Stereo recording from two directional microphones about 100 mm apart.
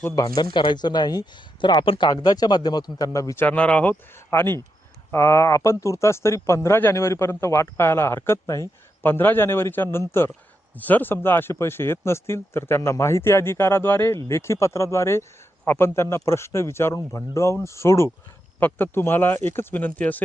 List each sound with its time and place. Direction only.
0.2 s speech: 40° left (ahead or behind)
2.0 s speech: 45° left (ahead or behind)
3.4 s speech: 15° left (ahead or behind)